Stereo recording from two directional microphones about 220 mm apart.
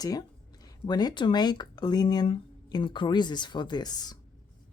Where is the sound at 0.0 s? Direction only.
15° left (ahead or behind).